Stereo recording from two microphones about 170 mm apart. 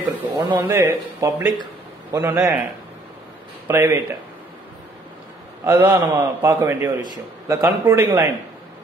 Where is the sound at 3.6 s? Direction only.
10° right (ahead or behind).